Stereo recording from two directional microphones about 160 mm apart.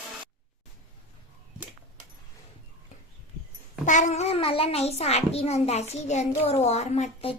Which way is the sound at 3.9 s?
50° left (ahead or behind).